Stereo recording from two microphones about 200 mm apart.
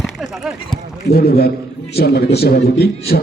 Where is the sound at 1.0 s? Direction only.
50° left (ahead or behind).